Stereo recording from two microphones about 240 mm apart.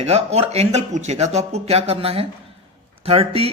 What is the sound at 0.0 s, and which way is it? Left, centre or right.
Speech, right.